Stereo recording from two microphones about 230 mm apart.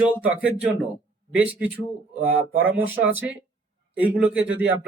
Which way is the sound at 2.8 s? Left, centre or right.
Centre.